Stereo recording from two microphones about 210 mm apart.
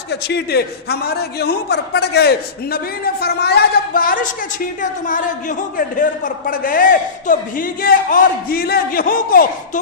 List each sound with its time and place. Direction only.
0.1 s a man's voice: 50° left (ahead or behind)